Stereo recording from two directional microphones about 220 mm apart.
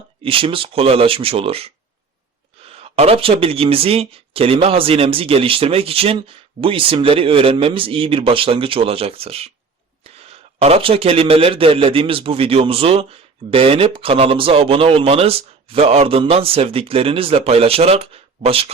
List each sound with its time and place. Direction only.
0.2 s a man's voice: 25° right (ahead or behind)